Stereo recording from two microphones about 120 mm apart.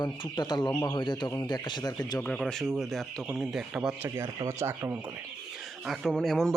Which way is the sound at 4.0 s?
25° right (ahead or behind).